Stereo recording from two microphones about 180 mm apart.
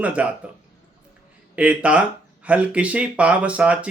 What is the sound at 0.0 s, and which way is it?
Speech, 5° right (ahead or behind).